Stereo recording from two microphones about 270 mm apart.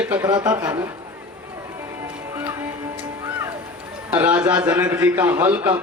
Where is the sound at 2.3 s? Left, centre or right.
Centre.